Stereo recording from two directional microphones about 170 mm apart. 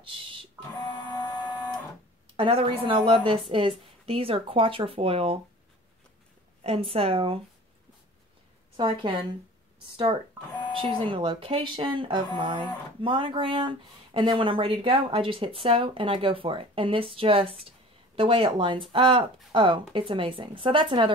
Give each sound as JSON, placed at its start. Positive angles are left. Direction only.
{"t": 0.0, "sound": "music", "side_deg": -30}
{"t": 0.7, "sound": "printer", "side_deg": 25}
{"t": 2.3, "sound": "speech", "side_deg": -30}
{"t": 6.6, "sound": "speech", "side_deg": -35}
{"t": 8.7, "sound": "a woman's voice", "side_deg": -30}
{"t": 10.8, "sound": "speech", "side_deg": -30}